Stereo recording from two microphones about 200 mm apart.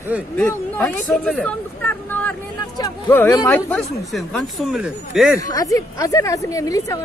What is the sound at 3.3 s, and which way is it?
Speech, 15° left (ahead or behind).